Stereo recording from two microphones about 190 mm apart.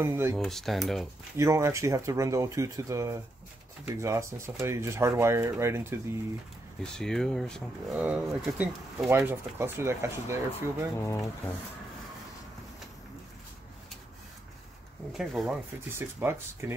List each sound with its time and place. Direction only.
0.0 s speech: 15° right (ahead or behind)
0.4 s speech: centre (ahead or behind)
1.3 s speech: 15° right (ahead or behind)
6.8 s speech: 5° left (ahead or behind); by 10.4 s 15° right (ahead or behind)
11.0 s speech: 15° left (ahead or behind)
15.1 s speech: centre (ahead or behind)